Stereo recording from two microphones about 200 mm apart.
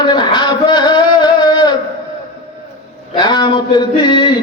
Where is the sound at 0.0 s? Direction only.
20° left (ahead or behind).